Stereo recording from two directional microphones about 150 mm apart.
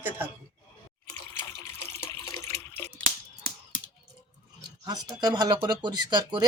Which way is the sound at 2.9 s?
90° right.